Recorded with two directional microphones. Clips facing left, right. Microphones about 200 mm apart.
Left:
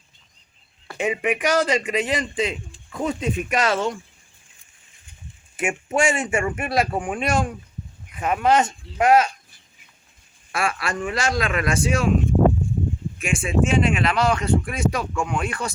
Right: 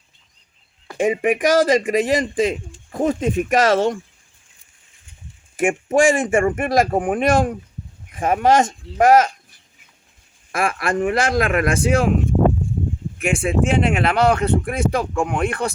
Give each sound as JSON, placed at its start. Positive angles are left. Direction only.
{"t": 0.9, "sound": "speech", "side_deg": -50}
{"t": 5.9, "sound": "speech", "side_deg": -45}
{"t": 8.1, "sound": "speech", "side_deg": -40}
{"t": 10.5, "sound": "speech", "side_deg": -50}
{"t": 13.1, "sound": "speech", "side_deg": -60}